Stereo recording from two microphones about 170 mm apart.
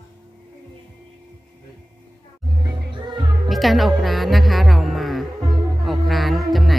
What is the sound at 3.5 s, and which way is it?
Music, centre (ahead or behind).